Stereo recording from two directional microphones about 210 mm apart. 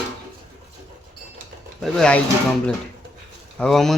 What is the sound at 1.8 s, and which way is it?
Speech, centre (ahead or behind).